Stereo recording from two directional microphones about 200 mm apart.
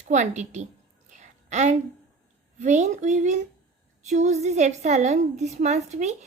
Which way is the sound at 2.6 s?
35° right (ahead or behind).